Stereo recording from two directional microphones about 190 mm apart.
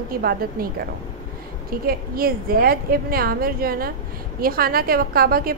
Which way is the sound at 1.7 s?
50° right (ahead or behind).